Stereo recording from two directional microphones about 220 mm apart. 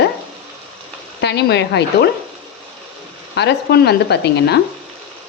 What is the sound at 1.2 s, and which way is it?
Speech, 50° left (ahead or behind).